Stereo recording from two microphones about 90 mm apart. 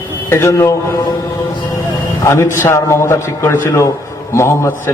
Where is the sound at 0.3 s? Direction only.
30° left (ahead or behind).